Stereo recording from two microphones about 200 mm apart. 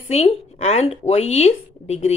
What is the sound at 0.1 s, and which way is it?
A woman's voice, 30° left (ahead or behind).